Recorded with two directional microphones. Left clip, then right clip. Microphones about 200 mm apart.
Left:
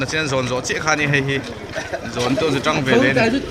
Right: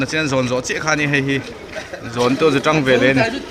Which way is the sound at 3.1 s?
65° left (ahead or behind).